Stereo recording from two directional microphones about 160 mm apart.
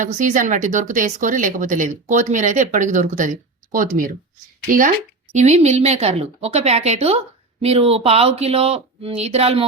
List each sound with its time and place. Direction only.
0.0 s speech: 55° right (ahead or behind)
5.3 s speech: 45° right (ahead or behind)